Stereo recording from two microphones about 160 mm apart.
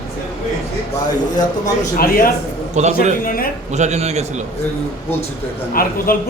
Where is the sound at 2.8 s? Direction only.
45° right (ahead or behind).